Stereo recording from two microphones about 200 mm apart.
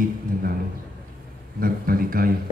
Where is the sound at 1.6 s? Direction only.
45° right (ahead or behind).